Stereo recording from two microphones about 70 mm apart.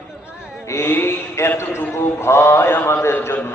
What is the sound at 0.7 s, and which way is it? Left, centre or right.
A man's voice, left.